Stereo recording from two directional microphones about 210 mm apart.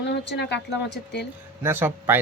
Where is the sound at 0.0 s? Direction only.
55° left (ahead or behind).